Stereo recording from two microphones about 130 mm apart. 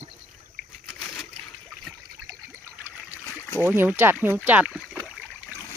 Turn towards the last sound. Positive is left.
turn(degrees=-10)  # may be behind; listen again after turning